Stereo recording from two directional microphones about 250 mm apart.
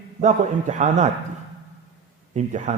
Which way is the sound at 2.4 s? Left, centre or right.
Right.